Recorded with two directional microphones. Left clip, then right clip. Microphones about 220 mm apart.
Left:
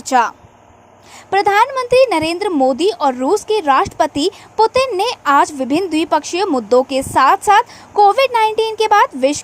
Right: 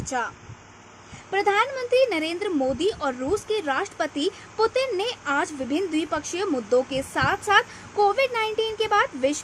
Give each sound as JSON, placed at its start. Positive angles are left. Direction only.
{"t": 0.0, "sound": "a woman's voice", "side_deg": 35}